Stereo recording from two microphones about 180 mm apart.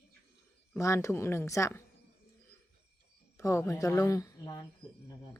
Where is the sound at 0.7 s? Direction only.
15° left (ahead or behind).